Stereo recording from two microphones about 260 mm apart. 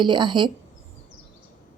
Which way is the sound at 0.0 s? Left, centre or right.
Centre.